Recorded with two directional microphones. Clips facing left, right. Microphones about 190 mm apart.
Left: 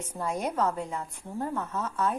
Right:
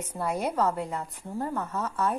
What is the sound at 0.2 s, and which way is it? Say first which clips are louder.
A woman's voice: right 2 dB; 10° right (ahead or behind).